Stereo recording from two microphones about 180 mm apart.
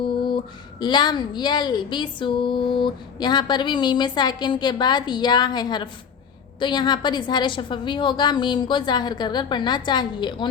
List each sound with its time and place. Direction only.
0.8 s a woman's voice: 25° left (ahead or behind)